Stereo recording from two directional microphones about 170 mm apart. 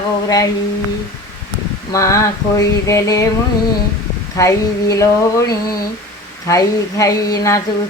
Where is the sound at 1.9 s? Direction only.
20° left (ahead or behind).